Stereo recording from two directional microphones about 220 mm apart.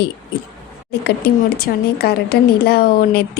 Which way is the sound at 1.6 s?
45° left (ahead or behind).